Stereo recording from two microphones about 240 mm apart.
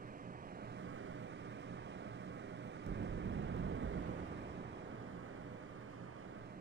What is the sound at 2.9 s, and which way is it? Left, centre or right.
Vehicle, right.